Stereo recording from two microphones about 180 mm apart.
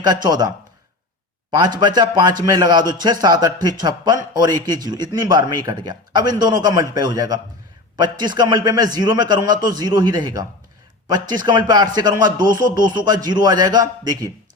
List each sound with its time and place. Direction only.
0.0 s a man's voice: 25° right (ahead or behind)